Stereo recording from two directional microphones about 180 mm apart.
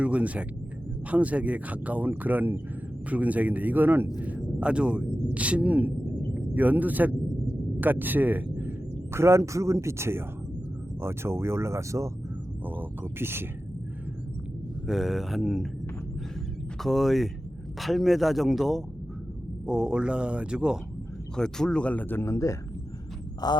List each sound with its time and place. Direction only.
0.0 s speech: 5° right (ahead or behind)
14.8 s speech: centre (ahead or behind)
16.8 s speech: centre (ahead or behind); by 22.5 s 15° left (ahead or behind)
23.4 s a sound: 20° left (ahead or behind)